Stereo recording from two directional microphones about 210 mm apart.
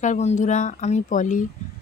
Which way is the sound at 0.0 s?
35° left (ahead or behind).